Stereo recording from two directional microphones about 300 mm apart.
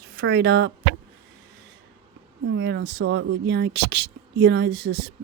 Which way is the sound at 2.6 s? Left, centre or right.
Right.